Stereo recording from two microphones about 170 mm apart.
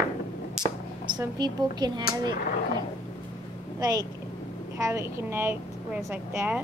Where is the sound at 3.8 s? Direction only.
25° right (ahead or behind).